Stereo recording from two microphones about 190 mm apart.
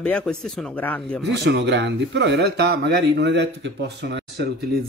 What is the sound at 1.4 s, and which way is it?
Speech, 60° right (ahead or behind).